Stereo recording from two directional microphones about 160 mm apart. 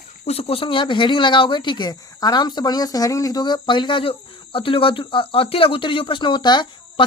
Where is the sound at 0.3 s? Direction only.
40° left (ahead or behind).